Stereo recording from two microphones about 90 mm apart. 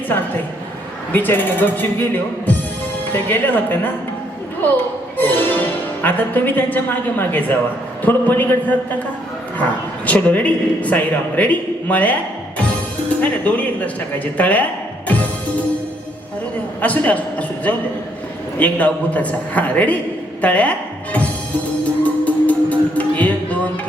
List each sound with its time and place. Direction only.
1.1 s speech: 20° left (ahead or behind)
5.1 s a woman's voice: 20° left (ahead or behind)
10.1 s a man's voice: 15° left (ahead or behind)
13.2 s a man's voice: 15° left (ahead or behind)
16.8 s a man's voice: 15° left (ahead or behind)
22.0 s music: 15° left (ahead or behind)